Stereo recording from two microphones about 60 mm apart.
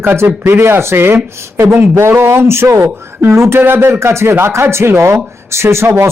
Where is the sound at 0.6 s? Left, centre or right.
Right.